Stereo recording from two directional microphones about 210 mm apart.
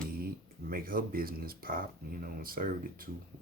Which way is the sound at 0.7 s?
45° right (ahead or behind).